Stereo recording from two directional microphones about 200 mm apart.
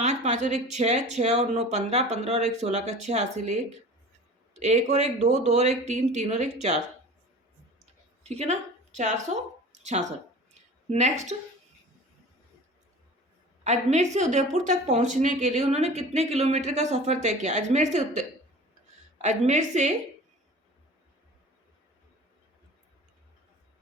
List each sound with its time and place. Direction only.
0.0 s speech: 35° right (ahead or behind)
4.6 s speech: 35° right (ahead or behind)
7.8 s a sound: 30° right (ahead or behind)
10.8 s speech: 35° right (ahead or behind)
13.7 s speech: 35° right (ahead or behind)
19.2 s speech: 35° right (ahead or behind)